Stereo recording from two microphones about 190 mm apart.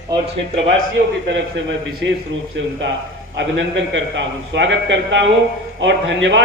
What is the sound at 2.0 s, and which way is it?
Speech, 70° right (ahead or behind).